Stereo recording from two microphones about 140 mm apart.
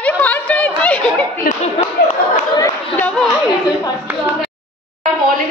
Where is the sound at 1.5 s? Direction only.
50° left (ahead or behind).